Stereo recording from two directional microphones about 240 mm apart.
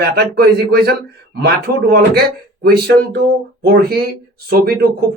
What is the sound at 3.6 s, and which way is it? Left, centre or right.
A man's voice, right.